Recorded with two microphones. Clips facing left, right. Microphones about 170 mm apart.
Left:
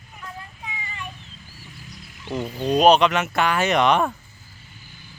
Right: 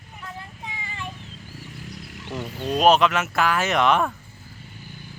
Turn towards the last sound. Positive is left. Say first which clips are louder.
# left 2 dB
turn(degrees=0)  # may be behind; listen again after turning